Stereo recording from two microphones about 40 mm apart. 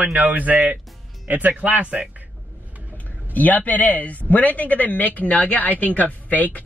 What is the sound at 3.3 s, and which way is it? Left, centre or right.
Speech, left.